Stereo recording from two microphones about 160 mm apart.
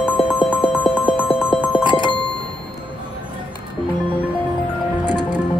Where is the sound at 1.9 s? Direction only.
30° left (ahead or behind).